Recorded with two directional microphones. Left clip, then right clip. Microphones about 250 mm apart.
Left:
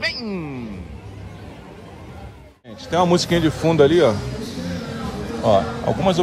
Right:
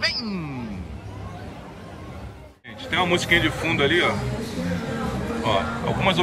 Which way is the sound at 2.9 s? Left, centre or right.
Left.